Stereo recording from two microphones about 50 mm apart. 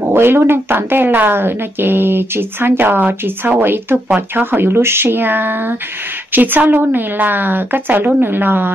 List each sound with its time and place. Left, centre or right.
0.0 s a woman's voice: right